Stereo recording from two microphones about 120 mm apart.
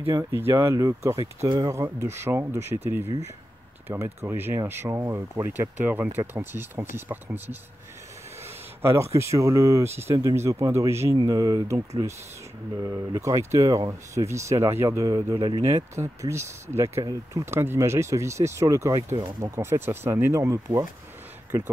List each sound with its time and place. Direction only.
0.1 s speech: 20° right (ahead or behind)
3.9 s speech: 20° right (ahead or behind)
8.8 s speech: 25° right (ahead or behind)